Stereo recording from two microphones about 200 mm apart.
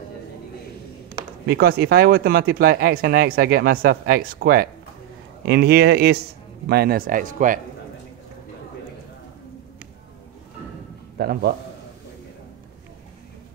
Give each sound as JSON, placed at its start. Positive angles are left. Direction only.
{"t": 1.5, "sound": "speech", "side_deg": -50}
{"t": 11.1, "sound": "a man's voice", "side_deg": -50}